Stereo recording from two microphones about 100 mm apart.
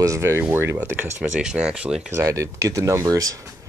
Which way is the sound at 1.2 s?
5° right (ahead or behind).